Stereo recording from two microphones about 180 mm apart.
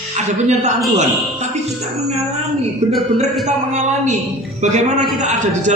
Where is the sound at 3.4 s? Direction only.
40° right (ahead or behind).